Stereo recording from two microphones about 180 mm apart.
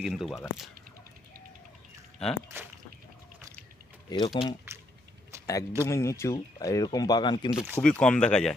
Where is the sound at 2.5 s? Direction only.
15° right (ahead or behind).